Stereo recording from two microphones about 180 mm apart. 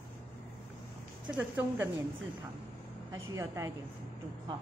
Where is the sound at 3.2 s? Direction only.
15° right (ahead or behind).